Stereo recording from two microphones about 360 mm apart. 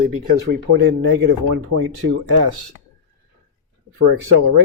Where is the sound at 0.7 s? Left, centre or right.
Right.